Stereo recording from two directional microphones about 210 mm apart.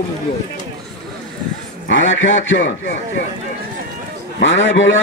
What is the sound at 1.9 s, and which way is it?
Speech, 65° left (ahead or behind).